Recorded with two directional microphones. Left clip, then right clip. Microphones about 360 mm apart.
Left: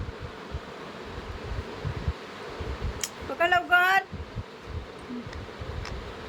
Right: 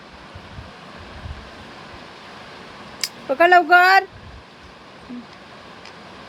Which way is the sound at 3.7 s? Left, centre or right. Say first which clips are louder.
Right 6 dB; centre.